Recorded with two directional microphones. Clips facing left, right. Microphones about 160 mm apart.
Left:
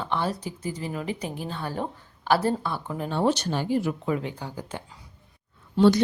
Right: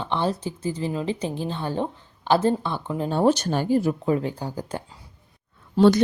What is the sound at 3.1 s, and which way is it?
Speech, 45° right (ahead or behind).